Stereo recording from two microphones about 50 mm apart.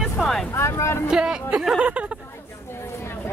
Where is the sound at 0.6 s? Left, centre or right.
Left.